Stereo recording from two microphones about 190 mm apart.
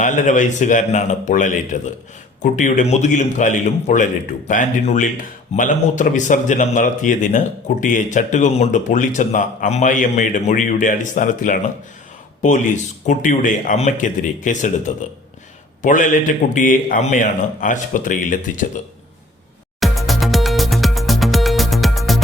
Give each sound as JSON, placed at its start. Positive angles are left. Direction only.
{"t": 0.0, "sound": "a man's voice", "side_deg": 40}
{"t": 19.8, "sound": "music", "side_deg": 0}